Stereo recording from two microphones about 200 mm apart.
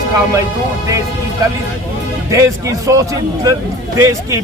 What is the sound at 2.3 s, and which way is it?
A man's voice, 15° right (ahead or behind).